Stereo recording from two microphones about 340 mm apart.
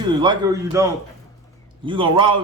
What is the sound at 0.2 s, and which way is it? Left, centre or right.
Speech, centre.